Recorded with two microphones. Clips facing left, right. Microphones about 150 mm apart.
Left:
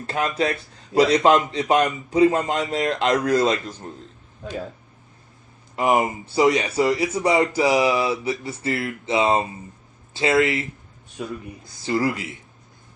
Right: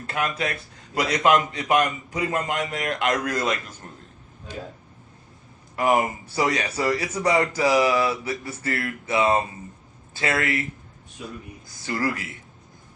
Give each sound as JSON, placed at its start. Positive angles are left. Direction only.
{"t": 0.1, "sound": "a man's voice", "side_deg": 30}
{"t": 5.7, "sound": "a man's voice", "side_deg": 20}
{"t": 11.9, "sound": "a man's voice", "side_deg": 20}